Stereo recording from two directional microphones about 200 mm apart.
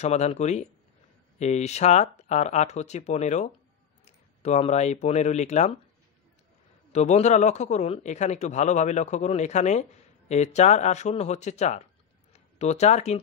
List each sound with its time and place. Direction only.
0.0 s a man's voice: 35° left (ahead or behind)
6.9 s a man's voice: 35° left (ahead or behind)